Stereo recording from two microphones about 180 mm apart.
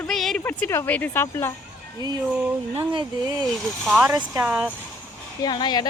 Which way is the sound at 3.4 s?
Centre (ahead or behind).